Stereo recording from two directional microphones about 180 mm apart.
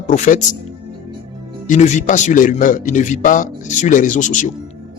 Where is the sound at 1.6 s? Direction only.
40° left (ahead or behind).